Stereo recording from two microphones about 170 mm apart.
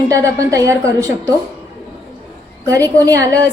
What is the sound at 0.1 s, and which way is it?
A woman's voice, 20° right (ahead or behind).